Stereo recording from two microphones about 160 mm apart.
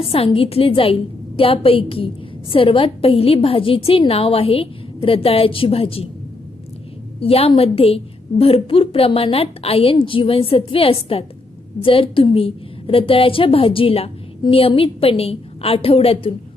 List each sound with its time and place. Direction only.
0.0 s a woman's voice: 35° left (ahead or behind)
7.2 s a woman's voice: 35° left (ahead or behind)